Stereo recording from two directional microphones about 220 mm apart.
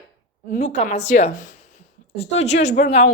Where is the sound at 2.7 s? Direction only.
35° left (ahead or behind).